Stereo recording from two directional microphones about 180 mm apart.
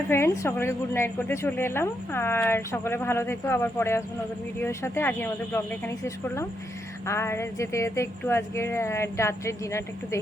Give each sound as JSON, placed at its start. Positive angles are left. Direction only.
{"t": 0.1, "sound": "a woman's voice", "side_deg": 15}